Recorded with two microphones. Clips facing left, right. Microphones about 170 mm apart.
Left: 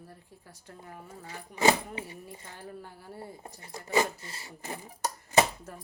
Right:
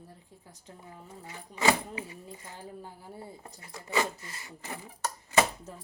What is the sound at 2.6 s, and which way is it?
Speech, 15° right (ahead or behind).